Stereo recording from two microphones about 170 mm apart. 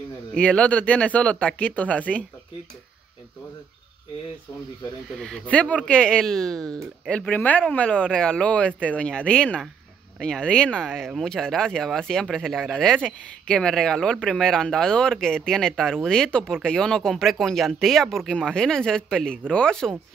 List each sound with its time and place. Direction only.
0.3 s speech: 5° left (ahead or behind)
5.2 s speech: 5° left (ahead or behind)